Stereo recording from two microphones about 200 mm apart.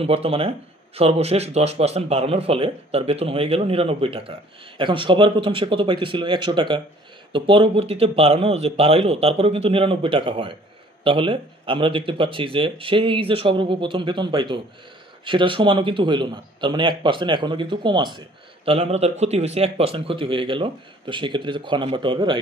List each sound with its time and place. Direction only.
0.0 s speech: 30° right (ahead or behind)